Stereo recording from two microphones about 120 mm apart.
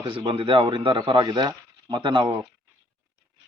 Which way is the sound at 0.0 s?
45° right (ahead or behind).